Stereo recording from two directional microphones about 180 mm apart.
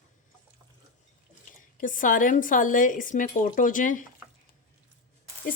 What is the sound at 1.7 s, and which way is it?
Speech, 50° left (ahead or behind).